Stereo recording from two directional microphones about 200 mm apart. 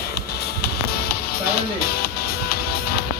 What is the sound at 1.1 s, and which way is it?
Speech, 50° left (ahead or behind).